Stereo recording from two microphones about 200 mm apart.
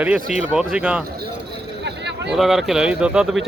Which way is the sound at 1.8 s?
60° right (ahead or behind).